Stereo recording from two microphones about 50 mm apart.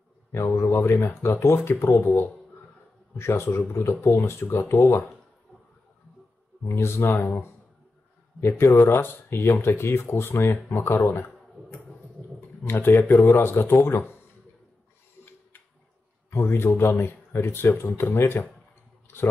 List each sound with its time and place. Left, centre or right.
0.3 s speech: left
3.4 s speech: left
6.6 s speech: left
8.4 s speech: left
10.5 s speech: left
11.1 s a sound: left
12.4 s speech: left
16.3 s speech: left